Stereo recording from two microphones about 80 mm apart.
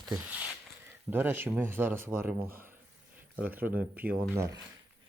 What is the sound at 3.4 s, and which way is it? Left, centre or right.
Speech, right.